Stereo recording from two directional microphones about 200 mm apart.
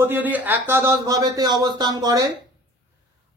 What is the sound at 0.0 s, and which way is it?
A man's voice, 10° right (ahead or behind).